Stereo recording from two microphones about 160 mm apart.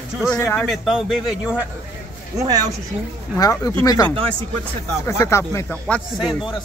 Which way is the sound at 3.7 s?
20° left (ahead or behind).